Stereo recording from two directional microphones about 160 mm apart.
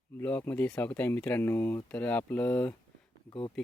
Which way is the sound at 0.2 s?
10° left (ahead or behind).